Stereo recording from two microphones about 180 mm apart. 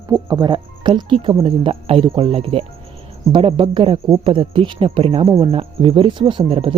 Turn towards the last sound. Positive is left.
turn(degrees=-30)  # may be behind; listen again after turning